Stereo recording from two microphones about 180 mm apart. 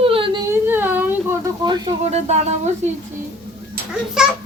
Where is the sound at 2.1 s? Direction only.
40° right (ahead or behind).